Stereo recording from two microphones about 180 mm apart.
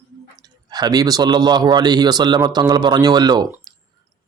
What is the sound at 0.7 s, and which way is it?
Speech, 20° right (ahead or behind).